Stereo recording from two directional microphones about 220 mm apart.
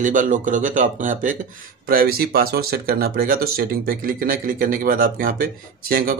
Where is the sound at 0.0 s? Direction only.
35° right (ahead or behind).